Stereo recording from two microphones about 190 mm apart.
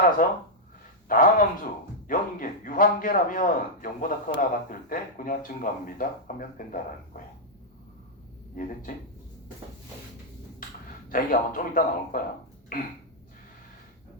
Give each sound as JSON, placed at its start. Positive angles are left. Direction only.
{"t": 0.2, "sound": "speech", "side_deg": 45}
{"t": 8.6, "sound": "speech", "side_deg": 45}
{"t": 11.1, "sound": "speech", "side_deg": 45}